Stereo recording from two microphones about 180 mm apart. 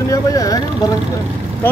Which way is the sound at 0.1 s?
20° left (ahead or behind).